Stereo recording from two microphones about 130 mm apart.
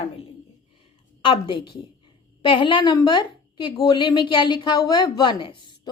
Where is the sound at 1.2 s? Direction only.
40° left (ahead or behind).